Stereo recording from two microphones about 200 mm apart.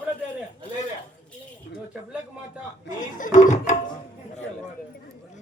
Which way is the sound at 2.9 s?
40° left (ahead or behind).